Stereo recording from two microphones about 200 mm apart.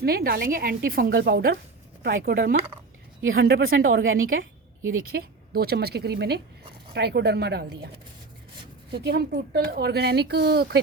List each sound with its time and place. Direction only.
0.0 s speech: 50° right (ahead or behind)
3.2 s speech: 80° right
4.9 s speech: 50° right (ahead or behind)
8.9 s speech: 55° right (ahead or behind)